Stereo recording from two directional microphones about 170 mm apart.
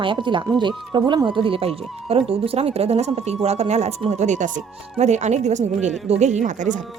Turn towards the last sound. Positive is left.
turn(degrees=-45)  # may be behind; listen again after turning